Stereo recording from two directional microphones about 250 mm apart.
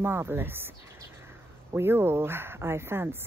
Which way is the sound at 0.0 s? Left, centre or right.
Centre.